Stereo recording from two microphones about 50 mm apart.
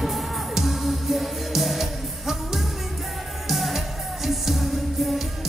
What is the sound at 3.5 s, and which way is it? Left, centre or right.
Music, centre.